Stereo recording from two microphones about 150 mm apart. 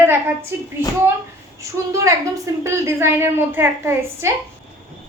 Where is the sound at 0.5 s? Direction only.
15° right (ahead or behind).